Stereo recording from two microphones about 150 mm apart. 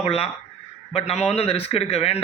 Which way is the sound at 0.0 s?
40° left (ahead or behind).